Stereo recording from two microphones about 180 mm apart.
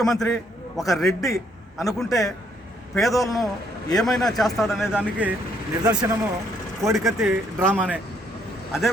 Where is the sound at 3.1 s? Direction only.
20° left (ahead or behind).